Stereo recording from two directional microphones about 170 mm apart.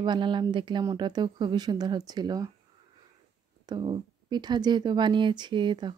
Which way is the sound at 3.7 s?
25° right (ahead or behind).